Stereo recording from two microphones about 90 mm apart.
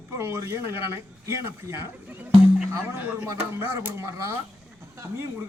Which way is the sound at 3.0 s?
20° right (ahead or behind).